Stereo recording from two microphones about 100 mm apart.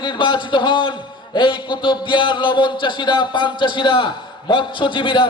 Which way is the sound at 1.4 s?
55° left (ahead or behind).